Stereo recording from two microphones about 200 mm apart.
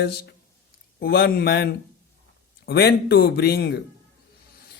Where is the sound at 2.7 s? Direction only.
55° left (ahead or behind).